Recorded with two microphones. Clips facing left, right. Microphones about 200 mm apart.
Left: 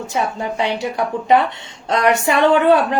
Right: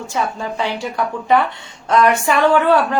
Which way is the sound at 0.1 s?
20° left (ahead or behind).